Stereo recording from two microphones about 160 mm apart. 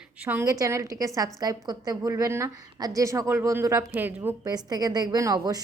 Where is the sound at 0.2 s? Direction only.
10° right (ahead or behind).